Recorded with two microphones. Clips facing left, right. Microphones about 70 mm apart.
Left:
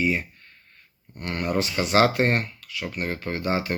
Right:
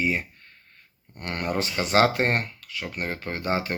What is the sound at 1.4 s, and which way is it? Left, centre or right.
Speech, right.